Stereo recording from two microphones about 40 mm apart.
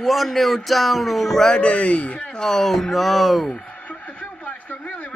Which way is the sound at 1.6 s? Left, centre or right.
Left.